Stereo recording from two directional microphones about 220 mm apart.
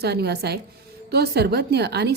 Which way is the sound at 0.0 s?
50° right (ahead or behind).